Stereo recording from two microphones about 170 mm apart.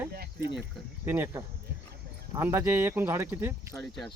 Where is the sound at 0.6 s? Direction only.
15° right (ahead or behind).